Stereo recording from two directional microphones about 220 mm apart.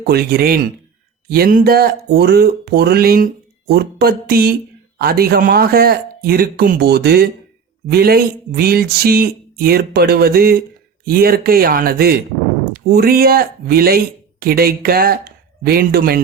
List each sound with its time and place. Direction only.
0.0 s speech: 45° right (ahead or behind)